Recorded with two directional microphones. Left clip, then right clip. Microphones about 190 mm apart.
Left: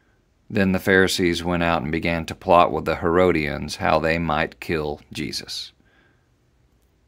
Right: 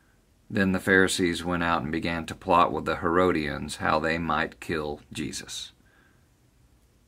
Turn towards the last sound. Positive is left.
turn(degrees=25)  # may be behind; listen again after turning